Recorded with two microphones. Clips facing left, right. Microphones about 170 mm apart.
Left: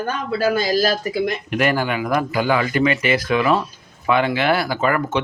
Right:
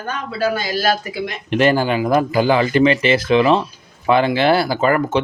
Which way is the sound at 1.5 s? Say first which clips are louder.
Right 8 dB; 30° right (ahead or behind).